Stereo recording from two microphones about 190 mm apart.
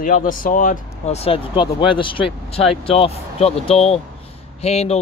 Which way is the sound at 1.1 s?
30° left (ahead or behind).